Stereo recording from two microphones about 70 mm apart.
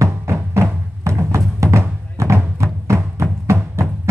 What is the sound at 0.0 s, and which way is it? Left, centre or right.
Music, right.